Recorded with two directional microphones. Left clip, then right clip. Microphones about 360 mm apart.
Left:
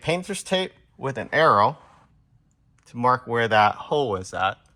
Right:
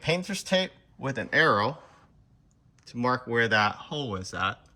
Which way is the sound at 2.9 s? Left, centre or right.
Centre.